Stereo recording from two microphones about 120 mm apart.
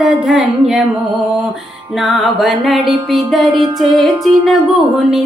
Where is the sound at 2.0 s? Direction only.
Centre (ahead or behind).